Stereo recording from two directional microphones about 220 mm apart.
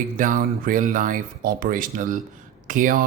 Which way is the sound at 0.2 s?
40° right (ahead or behind).